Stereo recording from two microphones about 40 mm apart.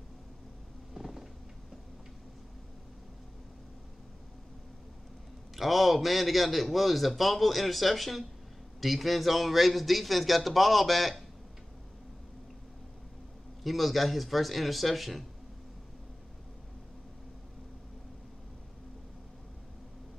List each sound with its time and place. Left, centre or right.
0.9 s a sound: centre
5.6 s a man's voice: centre
13.7 s a man's voice: centre